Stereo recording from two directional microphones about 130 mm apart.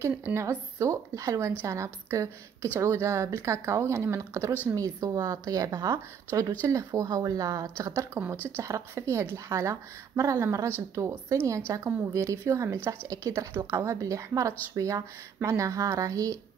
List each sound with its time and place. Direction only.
0.0 s a woman's voice: 20° right (ahead or behind)